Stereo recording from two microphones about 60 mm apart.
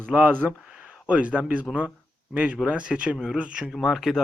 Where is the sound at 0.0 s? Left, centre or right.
Right.